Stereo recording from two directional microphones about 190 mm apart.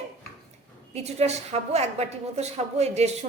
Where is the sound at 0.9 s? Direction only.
35° right (ahead or behind).